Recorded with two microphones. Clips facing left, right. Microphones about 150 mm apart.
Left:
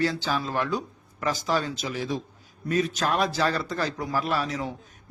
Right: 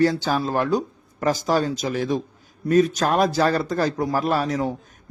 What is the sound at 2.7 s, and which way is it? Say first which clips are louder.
A man's voice: right 7 dB; 45° right (ahead or behind).